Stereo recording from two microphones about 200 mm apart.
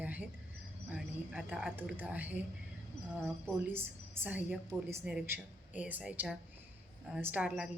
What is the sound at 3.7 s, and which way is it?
A woman's voice, 10° right (ahead or behind).